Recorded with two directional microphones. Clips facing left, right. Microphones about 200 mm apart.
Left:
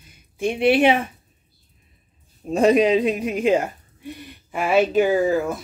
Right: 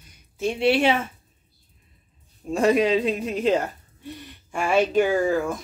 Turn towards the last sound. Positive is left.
turn(degrees=5)  # may be behind; listen again after turning